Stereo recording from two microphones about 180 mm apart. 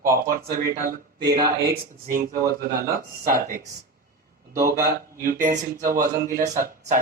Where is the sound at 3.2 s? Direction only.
50° right (ahead or behind).